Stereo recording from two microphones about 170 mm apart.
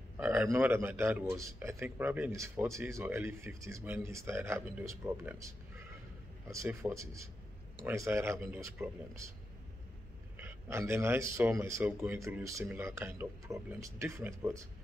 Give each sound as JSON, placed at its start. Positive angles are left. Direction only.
{"t": 0.2, "sound": "a man's voice", "side_deg": -15}
{"t": 6.5, "sound": "a man's voice", "side_deg": -15}
{"t": 10.3, "sound": "a man's voice", "side_deg": -15}